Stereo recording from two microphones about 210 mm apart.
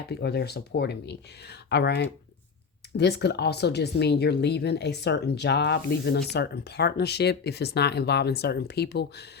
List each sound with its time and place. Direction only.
0.1 s speech: 50° left (ahead or behind)